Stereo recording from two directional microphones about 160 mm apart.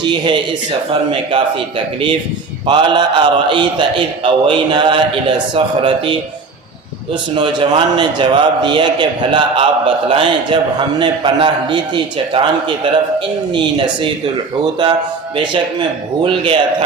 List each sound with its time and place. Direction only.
0.0 s a man's voice: 30° right (ahead or behind)
2.6 s a man's voice: 30° right (ahead or behind)
15.4 s a man's voice: 30° right (ahead or behind)